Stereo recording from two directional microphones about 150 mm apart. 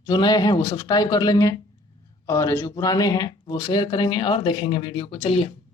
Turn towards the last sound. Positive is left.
turn(degrees=35)  # may be behind; listen again after turning